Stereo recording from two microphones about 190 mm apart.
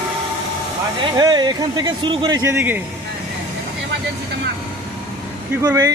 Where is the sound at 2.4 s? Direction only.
10° right (ahead or behind).